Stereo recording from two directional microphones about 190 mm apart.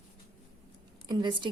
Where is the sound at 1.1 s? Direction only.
25° right (ahead or behind).